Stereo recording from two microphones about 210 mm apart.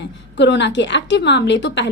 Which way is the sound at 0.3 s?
55° left (ahead or behind).